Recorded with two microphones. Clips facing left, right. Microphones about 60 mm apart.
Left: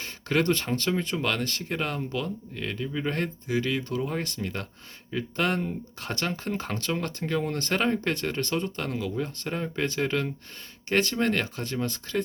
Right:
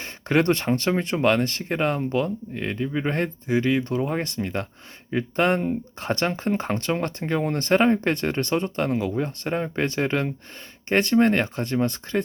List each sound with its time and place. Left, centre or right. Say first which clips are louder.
0.0 s speech: right 4 dB; right